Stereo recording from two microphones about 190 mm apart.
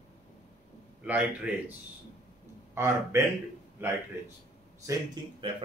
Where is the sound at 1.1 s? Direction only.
5° right (ahead or behind).